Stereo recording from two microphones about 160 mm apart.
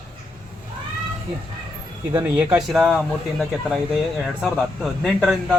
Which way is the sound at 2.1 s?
10° right (ahead or behind).